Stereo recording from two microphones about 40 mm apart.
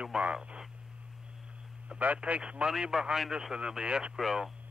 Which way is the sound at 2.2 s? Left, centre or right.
Right.